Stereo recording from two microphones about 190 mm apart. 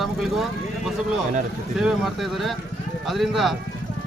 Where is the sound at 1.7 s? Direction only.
5° right (ahead or behind).